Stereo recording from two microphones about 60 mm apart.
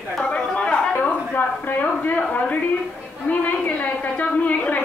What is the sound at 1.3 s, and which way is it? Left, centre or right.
A woman's voice, left.